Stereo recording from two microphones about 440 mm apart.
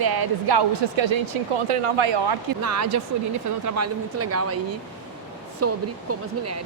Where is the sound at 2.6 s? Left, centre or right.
Right.